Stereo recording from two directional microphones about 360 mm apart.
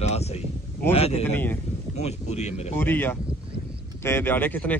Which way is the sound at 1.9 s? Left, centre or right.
Centre.